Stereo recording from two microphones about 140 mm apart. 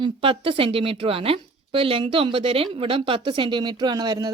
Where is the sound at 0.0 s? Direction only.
40° right (ahead or behind).